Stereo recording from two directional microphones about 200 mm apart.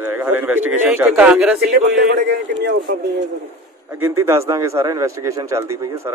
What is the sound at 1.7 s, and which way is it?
A man's voice, 55° right (ahead or behind).